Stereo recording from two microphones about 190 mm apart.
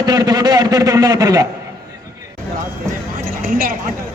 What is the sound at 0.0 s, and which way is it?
A man's voice, 20° right (ahead or behind).